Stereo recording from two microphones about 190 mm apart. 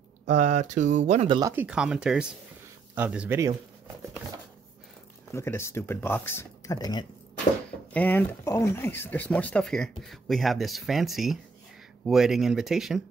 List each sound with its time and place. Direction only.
0.3 s speech: 40° right (ahead or behind)
1.4 s speech: 10° right (ahead or behind)
5.3 s speech: 15° left (ahead or behind)
7.9 s speech: 10° left (ahead or behind)